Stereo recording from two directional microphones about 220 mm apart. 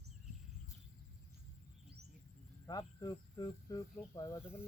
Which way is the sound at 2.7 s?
15° left (ahead or behind).